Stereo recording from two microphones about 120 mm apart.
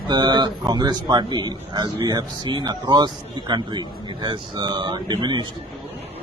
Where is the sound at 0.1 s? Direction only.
40° right (ahead or behind).